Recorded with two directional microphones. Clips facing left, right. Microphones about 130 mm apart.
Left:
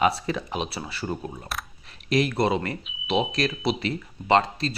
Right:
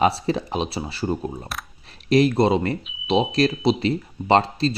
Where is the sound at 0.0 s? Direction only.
30° right (ahead or behind).